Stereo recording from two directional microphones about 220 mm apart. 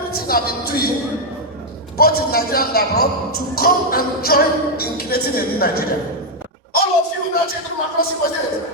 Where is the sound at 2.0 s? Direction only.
45° left (ahead or behind).